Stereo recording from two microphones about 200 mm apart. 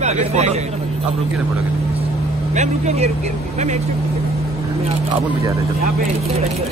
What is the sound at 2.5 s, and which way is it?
Speech, 35° right (ahead or behind).